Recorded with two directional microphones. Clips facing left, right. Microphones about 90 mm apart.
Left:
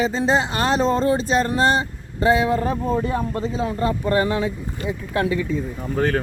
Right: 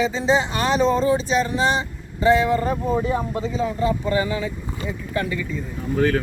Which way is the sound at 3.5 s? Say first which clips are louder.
Right 2 dB; 55° left (ahead or behind).